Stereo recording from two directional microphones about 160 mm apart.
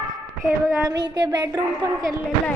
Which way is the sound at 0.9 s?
25° right (ahead or behind).